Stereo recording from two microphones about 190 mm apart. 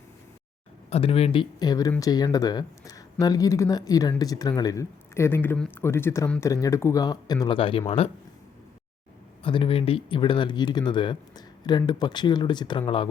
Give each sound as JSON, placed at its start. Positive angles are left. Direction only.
{"t": 0.9, "sound": "speech", "side_deg": 30}
{"t": 9.4, "sound": "speech", "side_deg": 25}